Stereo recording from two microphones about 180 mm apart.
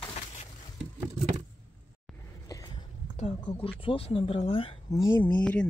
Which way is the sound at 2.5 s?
20° left (ahead or behind).